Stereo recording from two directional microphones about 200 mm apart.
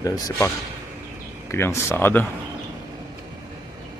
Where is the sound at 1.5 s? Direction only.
15° left (ahead or behind).